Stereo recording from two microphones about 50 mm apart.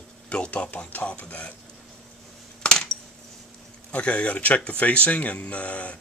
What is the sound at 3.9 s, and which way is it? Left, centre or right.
Speech, left.